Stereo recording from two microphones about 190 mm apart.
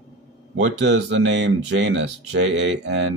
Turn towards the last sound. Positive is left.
turn(degrees=-70)  # may be behind; listen again after turning